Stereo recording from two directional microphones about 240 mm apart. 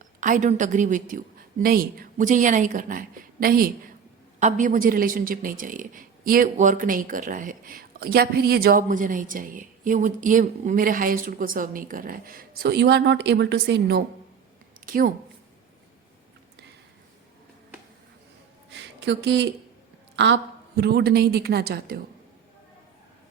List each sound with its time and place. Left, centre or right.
0.2 s a man's voice: right
18.7 s a sound: right
20.1 s a man's voice: right